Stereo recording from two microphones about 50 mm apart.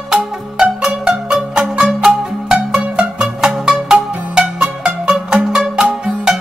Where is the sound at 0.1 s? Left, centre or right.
Centre.